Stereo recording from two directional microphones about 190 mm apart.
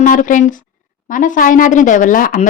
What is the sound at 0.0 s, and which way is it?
A woman's voice, 45° left (ahead or behind).